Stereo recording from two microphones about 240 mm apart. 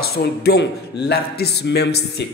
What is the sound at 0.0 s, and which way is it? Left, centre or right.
A man's voice, left.